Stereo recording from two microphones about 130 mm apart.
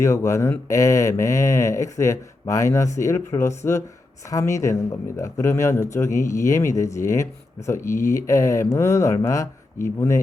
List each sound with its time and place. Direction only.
0.0 s speech: 20° left (ahead or behind)